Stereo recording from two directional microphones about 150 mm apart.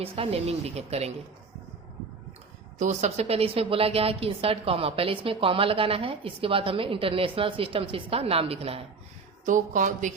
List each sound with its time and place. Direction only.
0.0 s speech: 40° right (ahead or behind)
2.7 s a woman's voice: 50° right (ahead or behind)
9.5 s a woman's voice: 60° right (ahead or behind)